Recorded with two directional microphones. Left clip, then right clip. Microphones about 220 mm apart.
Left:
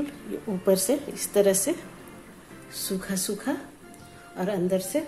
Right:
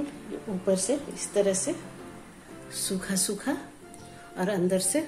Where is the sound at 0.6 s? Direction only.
20° left (ahead or behind).